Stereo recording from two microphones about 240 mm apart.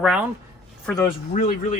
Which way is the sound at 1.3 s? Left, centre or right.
Left.